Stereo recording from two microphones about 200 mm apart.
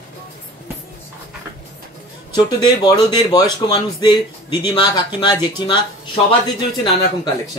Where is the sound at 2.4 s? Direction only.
20° left (ahead or behind).